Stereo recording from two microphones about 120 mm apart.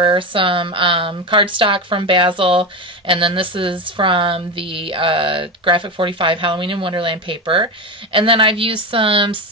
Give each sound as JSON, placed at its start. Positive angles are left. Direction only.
{"t": 0.0, "sound": "speech", "side_deg": -45}